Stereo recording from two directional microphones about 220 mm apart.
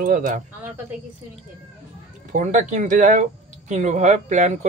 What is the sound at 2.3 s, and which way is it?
Speech, 35° right (ahead or behind).